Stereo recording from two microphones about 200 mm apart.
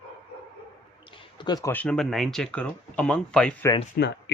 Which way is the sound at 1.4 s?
20° left (ahead or behind).